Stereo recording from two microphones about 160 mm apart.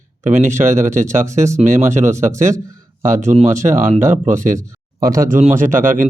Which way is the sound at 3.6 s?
15° right (ahead or behind).